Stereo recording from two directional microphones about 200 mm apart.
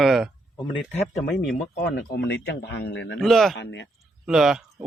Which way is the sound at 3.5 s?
60° left (ahead or behind).